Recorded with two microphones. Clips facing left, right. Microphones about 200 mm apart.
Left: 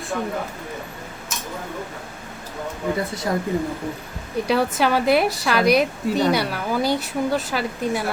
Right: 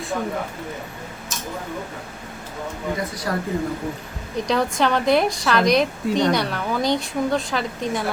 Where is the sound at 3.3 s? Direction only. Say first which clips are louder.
Left 2 dB; 20° left (ahead or behind).